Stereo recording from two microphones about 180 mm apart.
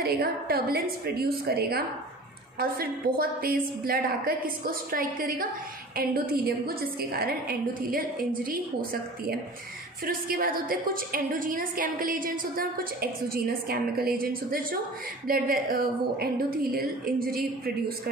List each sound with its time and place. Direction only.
0.0 s a woman's voice: 60° right (ahead or behind)
10.0 s a woman's voice: 55° right (ahead or behind)